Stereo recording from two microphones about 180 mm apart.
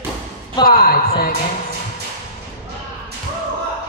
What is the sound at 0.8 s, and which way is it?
Speech, 55° left (ahead or behind).